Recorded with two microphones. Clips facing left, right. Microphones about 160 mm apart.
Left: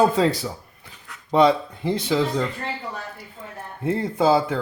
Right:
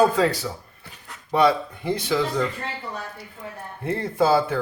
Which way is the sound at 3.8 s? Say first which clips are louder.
Left 1 dB; 20° left (ahead or behind).